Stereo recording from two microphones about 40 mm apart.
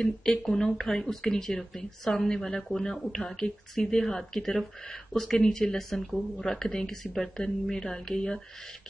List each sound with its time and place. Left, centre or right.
0.2 s speech: centre